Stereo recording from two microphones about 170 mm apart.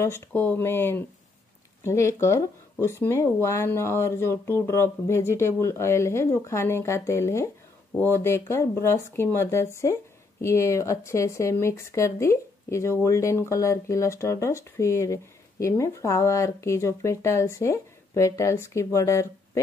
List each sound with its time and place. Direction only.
0.0 s speech: 15° left (ahead or behind)